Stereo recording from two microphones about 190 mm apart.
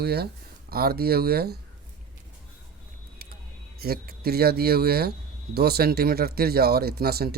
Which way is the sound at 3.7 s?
50° right (ahead or behind).